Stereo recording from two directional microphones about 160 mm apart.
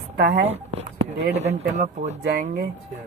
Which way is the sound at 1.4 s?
45° right (ahead or behind).